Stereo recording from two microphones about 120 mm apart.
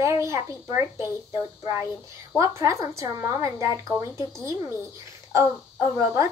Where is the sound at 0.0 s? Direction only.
25° right (ahead or behind).